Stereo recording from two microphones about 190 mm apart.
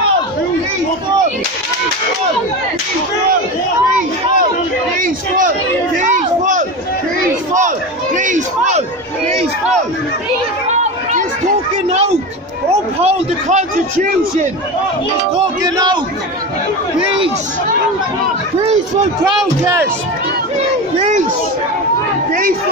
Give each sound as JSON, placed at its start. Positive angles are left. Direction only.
{"t": 5.9, "sound": "a man's voice", "side_deg": -40}
{"t": 10.7, "sound": "chatter", "side_deg": -40}
{"t": 13.0, "sound": "a man's voice", "side_deg": -35}
{"t": 15.3, "sound": "speech", "side_deg": -20}
{"t": 19.6, "sound": "speech", "side_deg": -10}
{"t": 22.3, "sound": "speech", "side_deg": -45}